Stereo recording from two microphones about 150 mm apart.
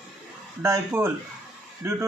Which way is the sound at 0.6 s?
15° right (ahead or behind).